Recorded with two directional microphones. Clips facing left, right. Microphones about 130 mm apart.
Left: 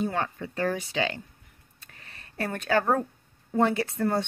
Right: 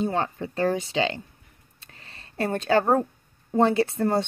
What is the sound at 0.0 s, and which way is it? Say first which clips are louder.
A woman's voice: right 3 dB; 25° right (ahead or behind).